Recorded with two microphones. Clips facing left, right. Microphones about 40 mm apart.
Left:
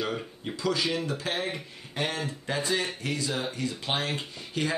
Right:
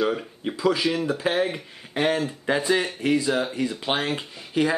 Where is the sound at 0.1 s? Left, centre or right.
Centre.